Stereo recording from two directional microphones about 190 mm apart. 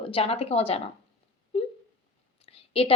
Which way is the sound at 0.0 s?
30° left (ahead or behind).